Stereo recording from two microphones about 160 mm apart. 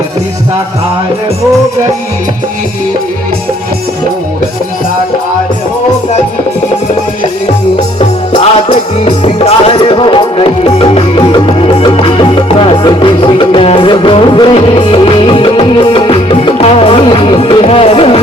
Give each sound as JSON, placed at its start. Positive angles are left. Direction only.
{"t": 7.9, "sound": "music", "side_deg": 35}